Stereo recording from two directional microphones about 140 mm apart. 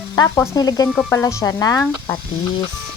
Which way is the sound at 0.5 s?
25° left (ahead or behind).